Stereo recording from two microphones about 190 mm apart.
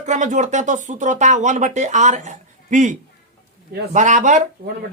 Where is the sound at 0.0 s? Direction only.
40° right (ahead or behind).